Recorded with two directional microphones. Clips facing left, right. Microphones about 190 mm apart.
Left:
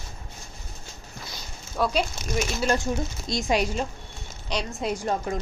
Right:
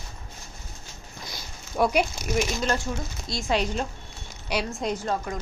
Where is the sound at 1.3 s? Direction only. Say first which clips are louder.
Right 2 dB; 15° right (ahead or behind).